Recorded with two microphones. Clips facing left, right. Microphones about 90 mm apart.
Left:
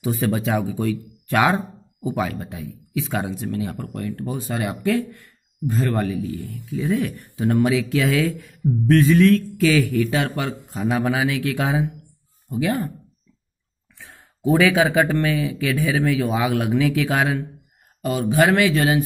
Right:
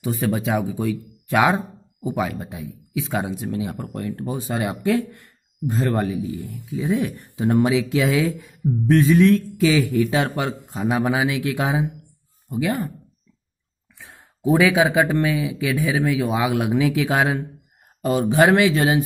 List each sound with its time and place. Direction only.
0.0 s speech: centre (ahead or behind)
2.3 s speech: 15° right (ahead or behind)
13.9 s speech: 10° right (ahead or behind)